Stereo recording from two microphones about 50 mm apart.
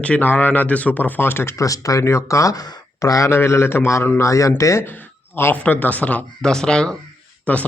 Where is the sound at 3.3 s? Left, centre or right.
Left.